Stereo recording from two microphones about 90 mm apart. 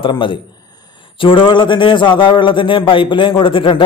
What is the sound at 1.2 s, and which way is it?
A man's voice, 65° left (ahead or behind).